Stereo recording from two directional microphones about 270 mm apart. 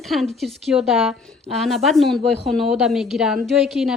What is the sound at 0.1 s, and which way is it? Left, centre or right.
A woman's voice, centre.